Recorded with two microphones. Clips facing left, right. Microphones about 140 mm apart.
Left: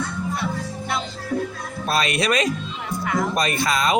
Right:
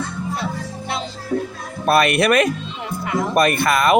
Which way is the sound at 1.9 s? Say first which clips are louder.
Right 6 dB; 60° right (ahead or behind).